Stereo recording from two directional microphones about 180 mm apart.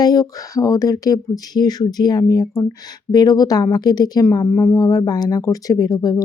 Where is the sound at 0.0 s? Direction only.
20° left (ahead or behind).